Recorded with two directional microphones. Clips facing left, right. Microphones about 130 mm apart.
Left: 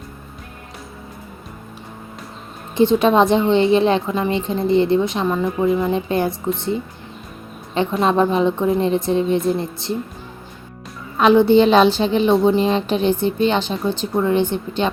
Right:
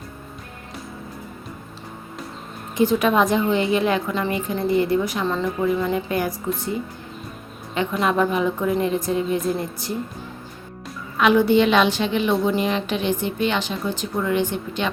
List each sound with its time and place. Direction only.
2.7 s a woman's voice: 25° left (ahead or behind)
11.2 s a woman's voice: 30° left (ahead or behind)